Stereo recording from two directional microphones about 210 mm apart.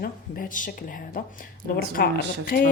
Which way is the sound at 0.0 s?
40° left (ahead or behind).